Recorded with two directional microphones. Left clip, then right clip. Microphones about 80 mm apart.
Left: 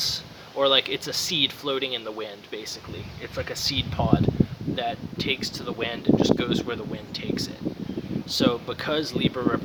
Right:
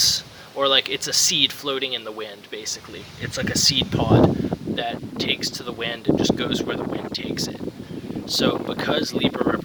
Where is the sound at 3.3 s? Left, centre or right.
Centre.